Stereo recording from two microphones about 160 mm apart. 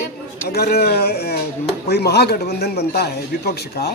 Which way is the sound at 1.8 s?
90° left.